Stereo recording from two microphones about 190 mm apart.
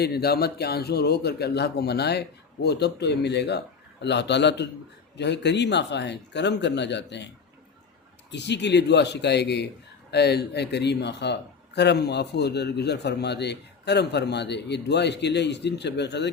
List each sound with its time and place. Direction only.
0.0 s speech: 55° left (ahead or behind)
8.3 s speech: 65° left (ahead or behind)